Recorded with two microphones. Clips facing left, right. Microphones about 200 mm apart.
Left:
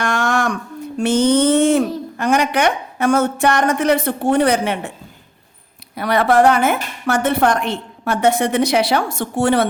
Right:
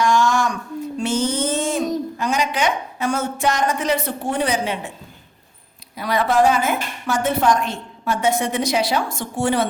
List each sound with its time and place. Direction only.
0.0 s a sound: 60° left (ahead or behind)
0.9 s speech: 65° left (ahead or behind)
6.0 s a woman's voice: 65° left (ahead or behind)